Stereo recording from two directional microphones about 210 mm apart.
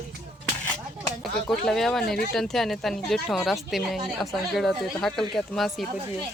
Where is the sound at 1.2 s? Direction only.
Centre (ahead or behind).